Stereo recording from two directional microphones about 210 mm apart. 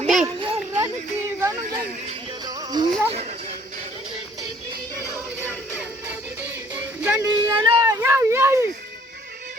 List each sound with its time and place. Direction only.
0.0 s children playing: centre (ahead or behind)
0.3 s children playing: 25° right (ahead or behind)
0.7 s a sound: 10° right (ahead or behind)
2.8 s speech: 20° right (ahead or behind)
5.4 s music: 10° right (ahead or behind)
7.0 s a sound: 5° right (ahead or behind)